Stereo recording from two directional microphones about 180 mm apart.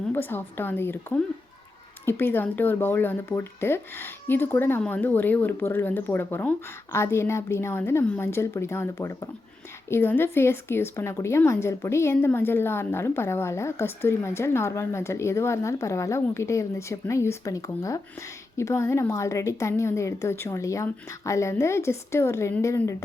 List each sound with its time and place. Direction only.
0.1 s a woman's voice: 10° left (ahead or behind)